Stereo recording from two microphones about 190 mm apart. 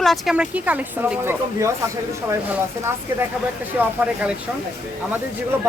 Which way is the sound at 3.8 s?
5° right (ahead or behind).